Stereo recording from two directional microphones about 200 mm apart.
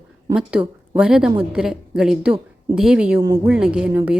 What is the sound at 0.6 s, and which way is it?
Speech, 20° right (ahead or behind).